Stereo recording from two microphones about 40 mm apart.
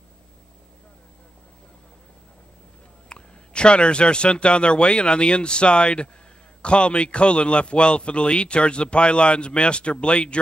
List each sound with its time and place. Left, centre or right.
3.1 s a man's voice: left